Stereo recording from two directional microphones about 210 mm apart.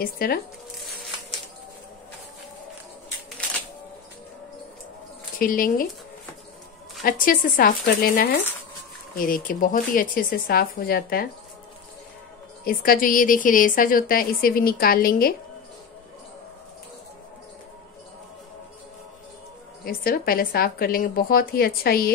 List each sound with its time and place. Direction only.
0.0 s a woman's voice: 45° left (ahead or behind)
5.4 s a woman's voice: 40° left (ahead or behind)
7.0 s a woman's voice: 40° left (ahead or behind)
12.6 s a woman's voice: 45° left (ahead or behind)
19.8 s a woman's voice: 45° left (ahead or behind)